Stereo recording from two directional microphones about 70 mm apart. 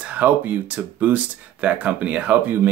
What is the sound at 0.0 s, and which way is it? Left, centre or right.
Speech, right.